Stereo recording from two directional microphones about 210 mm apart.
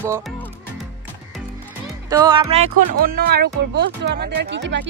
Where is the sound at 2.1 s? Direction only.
20° right (ahead or behind).